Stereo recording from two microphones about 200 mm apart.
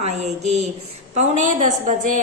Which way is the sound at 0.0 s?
35° right (ahead or behind).